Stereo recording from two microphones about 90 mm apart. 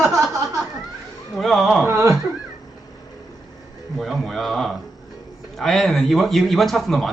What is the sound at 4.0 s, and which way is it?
A man's voice, centre (ahead or behind).